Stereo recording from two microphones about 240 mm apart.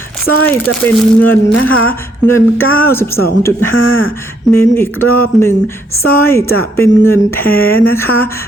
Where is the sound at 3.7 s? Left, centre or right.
Left.